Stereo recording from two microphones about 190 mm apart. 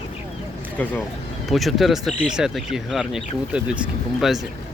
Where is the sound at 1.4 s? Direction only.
Centre (ahead or behind).